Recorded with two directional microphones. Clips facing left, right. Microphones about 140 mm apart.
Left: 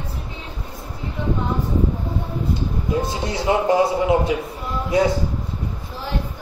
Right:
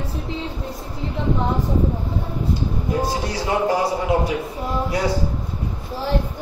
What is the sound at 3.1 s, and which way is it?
A man's voice, 20° left (ahead or behind).